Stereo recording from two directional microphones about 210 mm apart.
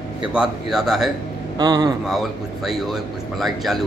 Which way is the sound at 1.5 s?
20° right (ahead or behind).